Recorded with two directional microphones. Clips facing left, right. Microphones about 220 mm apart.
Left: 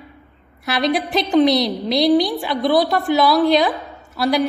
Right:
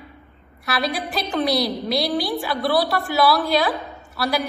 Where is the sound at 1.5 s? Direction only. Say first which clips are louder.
Left 4 dB; centre (ahead or behind).